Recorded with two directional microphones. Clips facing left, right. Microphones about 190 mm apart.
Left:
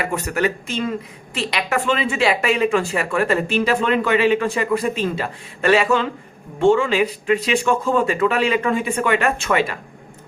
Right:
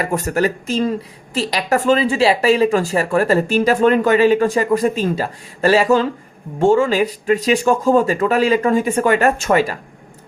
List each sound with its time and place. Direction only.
0.0 s speech: 40° right (ahead or behind)